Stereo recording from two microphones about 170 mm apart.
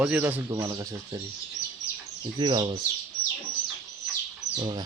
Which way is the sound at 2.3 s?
25° right (ahead or behind).